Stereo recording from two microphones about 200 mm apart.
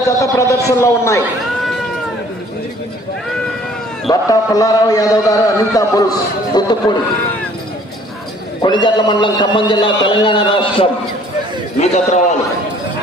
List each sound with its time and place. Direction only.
0.2 s a man's voice: 15° left (ahead or behind)
4.1 s a man's voice: 15° left (ahead or behind)
8.6 s a man's voice: 20° left (ahead or behind)